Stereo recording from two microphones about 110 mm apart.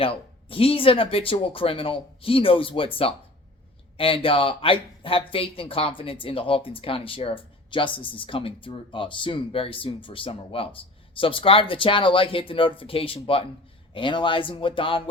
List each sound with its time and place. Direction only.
0.0 s speech: 55° left (ahead or behind)
13.9 s speech: 45° left (ahead or behind)